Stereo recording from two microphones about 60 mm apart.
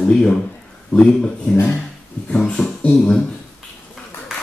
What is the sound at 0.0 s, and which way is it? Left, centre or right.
Speech, centre.